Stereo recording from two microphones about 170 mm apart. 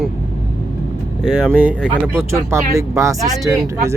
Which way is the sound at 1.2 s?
5° right (ahead or behind).